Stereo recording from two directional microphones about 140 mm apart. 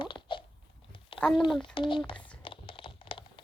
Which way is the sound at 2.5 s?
40° left (ahead or behind).